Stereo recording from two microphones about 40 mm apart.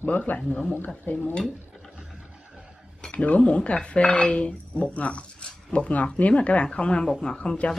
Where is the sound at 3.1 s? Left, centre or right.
Left.